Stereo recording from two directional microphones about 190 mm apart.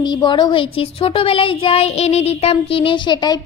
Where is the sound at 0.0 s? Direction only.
25° left (ahead or behind).